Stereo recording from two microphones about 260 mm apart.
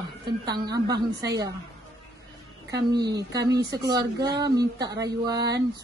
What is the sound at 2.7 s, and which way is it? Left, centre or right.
Speech, centre.